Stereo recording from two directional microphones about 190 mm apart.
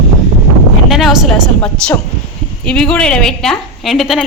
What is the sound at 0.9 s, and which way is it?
A woman's voice, centre (ahead or behind).